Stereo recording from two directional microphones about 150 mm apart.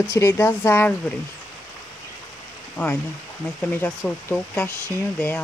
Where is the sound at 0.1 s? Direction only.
15° left (ahead or behind).